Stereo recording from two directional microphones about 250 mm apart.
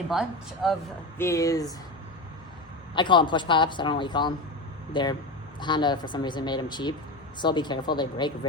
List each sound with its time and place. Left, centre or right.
0.1 s speech: centre
1.2 s speech: centre
2.9 s a man's voice: centre